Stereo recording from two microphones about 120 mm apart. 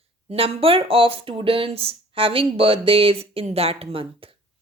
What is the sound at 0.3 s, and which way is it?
A woman's voice, 55° right (ahead or behind).